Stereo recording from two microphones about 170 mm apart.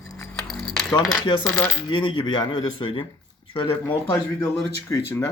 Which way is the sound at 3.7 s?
10° left (ahead or behind).